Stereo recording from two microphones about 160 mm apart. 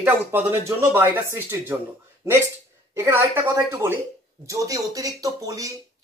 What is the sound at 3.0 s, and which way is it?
Speech, 15° right (ahead or behind).